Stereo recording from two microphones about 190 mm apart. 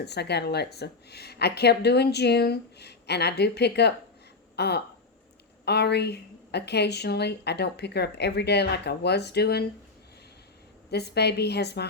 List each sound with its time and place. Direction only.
0.0 s speech: 60° left (ahead or behind)
10.9 s speech: 60° left (ahead or behind)